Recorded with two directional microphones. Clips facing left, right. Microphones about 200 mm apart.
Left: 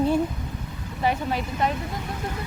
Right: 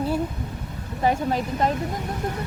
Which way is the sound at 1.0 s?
40° right (ahead or behind).